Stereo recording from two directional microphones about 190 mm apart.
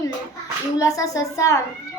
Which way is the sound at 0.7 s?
15° left (ahead or behind).